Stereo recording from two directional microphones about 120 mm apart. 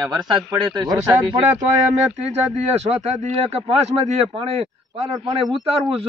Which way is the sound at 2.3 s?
65° right (ahead or behind).